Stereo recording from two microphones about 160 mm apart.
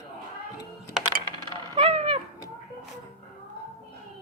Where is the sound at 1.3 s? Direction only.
30° right (ahead or behind).